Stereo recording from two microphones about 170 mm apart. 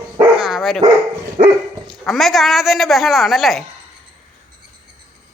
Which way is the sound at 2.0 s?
Centre (ahead or behind).